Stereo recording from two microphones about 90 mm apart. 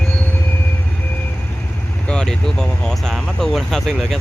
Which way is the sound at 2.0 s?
10° left (ahead or behind).